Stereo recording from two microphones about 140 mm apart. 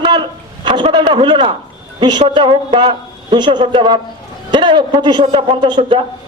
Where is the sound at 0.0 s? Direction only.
35° right (ahead or behind).